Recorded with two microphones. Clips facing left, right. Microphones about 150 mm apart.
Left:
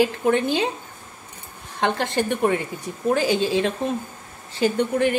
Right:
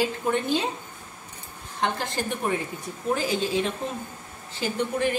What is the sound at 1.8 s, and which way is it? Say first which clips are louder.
A woman's voice: left 5 dB; 65° left (ahead or behind).